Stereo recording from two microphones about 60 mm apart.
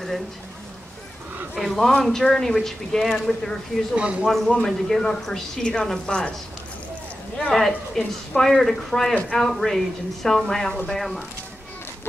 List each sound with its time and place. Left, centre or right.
1.6 s speech: centre
3.9 s speech: centre
4.3 s a woman's voice: centre
7.3 s a woman's voice: centre